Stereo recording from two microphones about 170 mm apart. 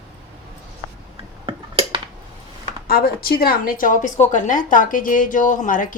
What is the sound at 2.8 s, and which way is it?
A woman's voice, 60° left (ahead or behind).